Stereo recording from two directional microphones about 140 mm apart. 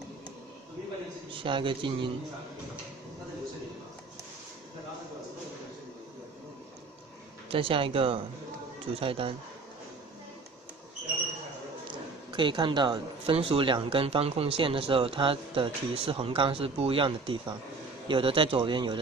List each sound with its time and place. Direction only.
1.3 s speech: 35° right (ahead or behind)
7.4 s speech: 40° right (ahead or behind)
11.9 s speech: 35° right (ahead or behind)